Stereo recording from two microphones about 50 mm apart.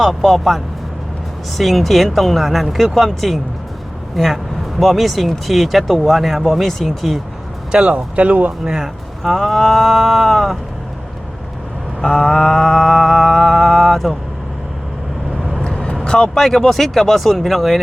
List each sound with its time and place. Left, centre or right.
0.0 s speech: centre
7.7 s speech: centre
8.6 s speech: centre
9.3 s speech: centre
12.0 s speech: centre
15.6 s vehicle: centre
16.0 s speech: centre
16.3 s speech: centre